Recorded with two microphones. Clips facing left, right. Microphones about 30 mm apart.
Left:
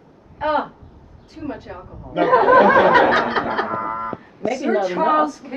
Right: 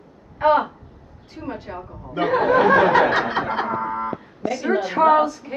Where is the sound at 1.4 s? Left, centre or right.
Centre.